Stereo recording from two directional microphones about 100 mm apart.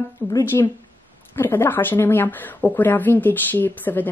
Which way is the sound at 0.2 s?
20° left (ahead or behind).